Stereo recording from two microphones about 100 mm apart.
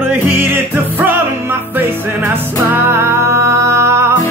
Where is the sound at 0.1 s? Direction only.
20° right (ahead or behind).